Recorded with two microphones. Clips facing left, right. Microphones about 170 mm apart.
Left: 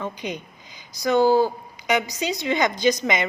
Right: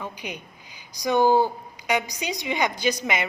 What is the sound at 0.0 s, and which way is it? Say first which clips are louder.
A woman's voice: left 5 dB; 10° right (ahead or behind).